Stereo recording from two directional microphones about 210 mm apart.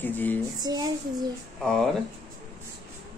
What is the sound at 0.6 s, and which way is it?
Speech, 20° right (ahead or behind).